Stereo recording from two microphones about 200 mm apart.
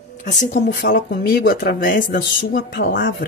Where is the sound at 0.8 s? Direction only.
50° left (ahead or behind).